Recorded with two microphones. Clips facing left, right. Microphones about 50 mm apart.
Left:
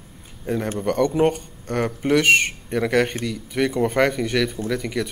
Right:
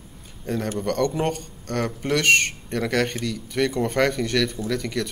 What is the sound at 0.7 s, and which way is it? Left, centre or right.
Speech, centre.